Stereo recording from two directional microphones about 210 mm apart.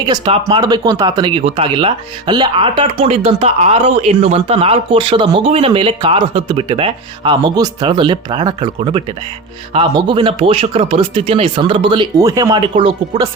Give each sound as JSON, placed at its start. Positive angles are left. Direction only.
{"t": 0.0, "sound": "speech", "side_deg": -20}